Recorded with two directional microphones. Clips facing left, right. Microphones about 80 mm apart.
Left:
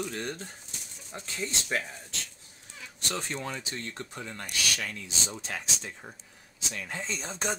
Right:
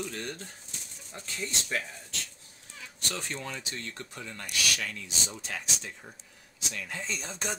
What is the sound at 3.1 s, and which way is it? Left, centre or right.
Speech, left.